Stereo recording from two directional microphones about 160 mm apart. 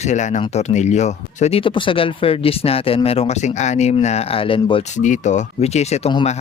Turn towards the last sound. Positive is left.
turn(degrees=40)  # may be behind; listen again after turning